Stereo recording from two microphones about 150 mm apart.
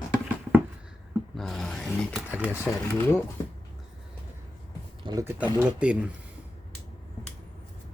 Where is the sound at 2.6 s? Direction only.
15° left (ahead or behind).